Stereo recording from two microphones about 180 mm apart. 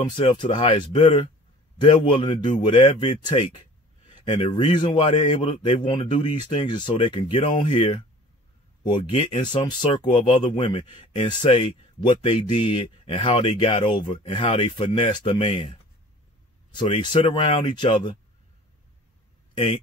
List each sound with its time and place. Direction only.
0.1 s a man's voice: 25° left (ahead or behind)
7.3 s a man's voice: 40° left (ahead or behind)
8.8 s speech: 30° left (ahead or behind)
17.0 s speech: 25° left (ahead or behind)
19.5 s speech: 35° left (ahead or behind)